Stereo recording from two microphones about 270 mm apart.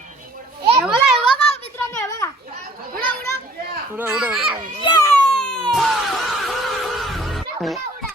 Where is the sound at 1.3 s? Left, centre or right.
Left.